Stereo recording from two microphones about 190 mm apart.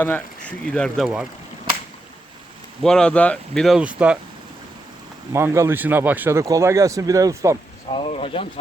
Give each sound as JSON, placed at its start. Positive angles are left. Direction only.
{"t": 0.0, "sound": "speech", "side_deg": 5}
{"t": 2.8, "sound": "speech", "side_deg": 5}
{"t": 5.3, "sound": "speech", "side_deg": -15}
{"t": 7.9, "sound": "speech", "side_deg": 30}